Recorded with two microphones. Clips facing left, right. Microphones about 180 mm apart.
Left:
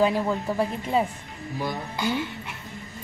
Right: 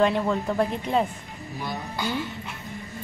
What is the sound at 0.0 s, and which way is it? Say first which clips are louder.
A woman's voice: right 1 dB; 5° left (ahead or behind).